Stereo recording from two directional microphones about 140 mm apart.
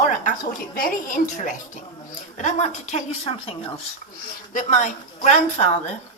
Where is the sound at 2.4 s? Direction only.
55° left (ahead or behind).